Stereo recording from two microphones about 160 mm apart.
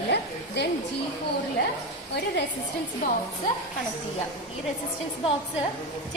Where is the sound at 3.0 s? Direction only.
65° left (ahead or behind).